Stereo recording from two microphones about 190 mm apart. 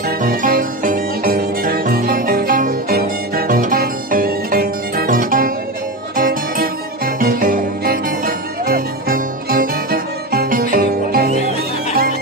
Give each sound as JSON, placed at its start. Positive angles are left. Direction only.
{"t": 0.1, "sound": "music", "side_deg": -50}